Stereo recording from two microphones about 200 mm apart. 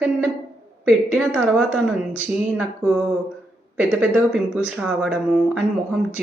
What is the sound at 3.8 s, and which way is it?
Speech, 5° right (ahead or behind).